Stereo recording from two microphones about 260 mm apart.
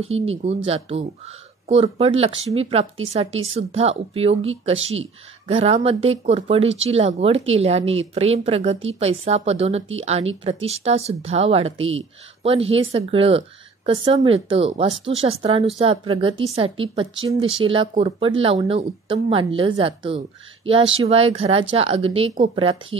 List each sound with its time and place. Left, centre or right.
0.0 s speech: right
5.5 s speech: right